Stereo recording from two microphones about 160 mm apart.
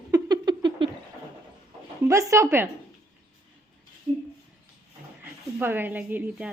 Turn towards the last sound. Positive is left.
turn(degrees=-10)  # may be behind; listen again after turning